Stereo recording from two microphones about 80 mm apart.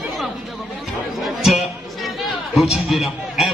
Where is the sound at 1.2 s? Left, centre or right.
Centre.